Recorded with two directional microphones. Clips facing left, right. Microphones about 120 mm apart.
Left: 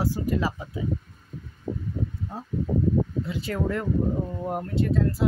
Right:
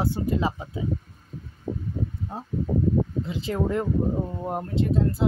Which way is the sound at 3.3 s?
20° right (ahead or behind).